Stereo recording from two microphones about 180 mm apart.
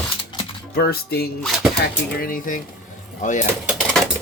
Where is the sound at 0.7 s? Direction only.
60° left (ahead or behind); by 3.5 s 45° left (ahead or behind).